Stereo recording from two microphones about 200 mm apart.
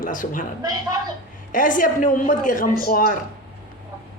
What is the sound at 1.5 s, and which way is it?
Speech, 40° left (ahead or behind).